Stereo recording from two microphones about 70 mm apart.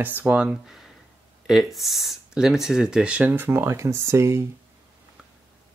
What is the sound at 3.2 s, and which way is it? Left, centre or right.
Speech, right.